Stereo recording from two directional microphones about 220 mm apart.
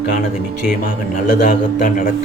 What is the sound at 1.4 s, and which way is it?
Speech, 40° left (ahead or behind).